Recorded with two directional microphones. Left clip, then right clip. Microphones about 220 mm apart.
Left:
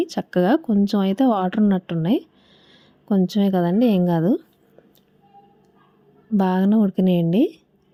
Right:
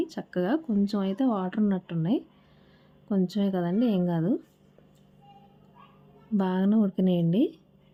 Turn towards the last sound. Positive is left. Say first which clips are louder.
# left 6 dB
turn(degrees=25)  # may be behind; listen again after turning